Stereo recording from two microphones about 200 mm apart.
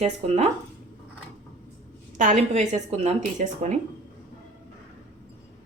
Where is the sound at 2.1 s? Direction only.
35° right (ahead or behind).